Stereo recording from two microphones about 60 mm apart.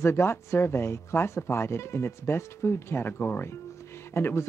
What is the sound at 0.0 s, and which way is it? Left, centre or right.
Speech, left.